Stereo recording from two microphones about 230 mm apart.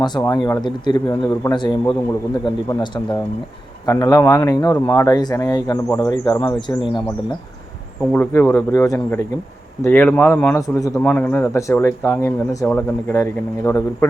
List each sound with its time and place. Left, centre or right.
0.0 s a man's voice: centre
8.1 s a man's voice: centre